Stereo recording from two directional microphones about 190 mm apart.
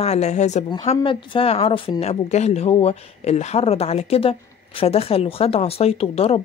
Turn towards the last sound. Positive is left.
turn(degrees=30)  # may be behind; listen again after turning